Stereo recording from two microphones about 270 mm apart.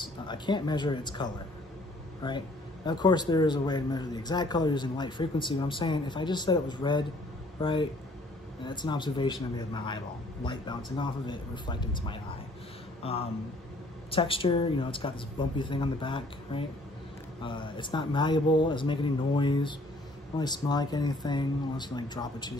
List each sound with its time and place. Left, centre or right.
0.0 s speech: centre